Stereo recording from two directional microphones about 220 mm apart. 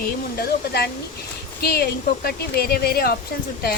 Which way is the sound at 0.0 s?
45° left (ahead or behind).